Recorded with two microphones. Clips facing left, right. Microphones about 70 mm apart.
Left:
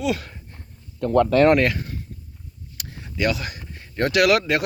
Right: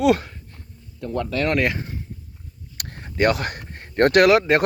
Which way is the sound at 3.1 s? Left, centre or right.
Right.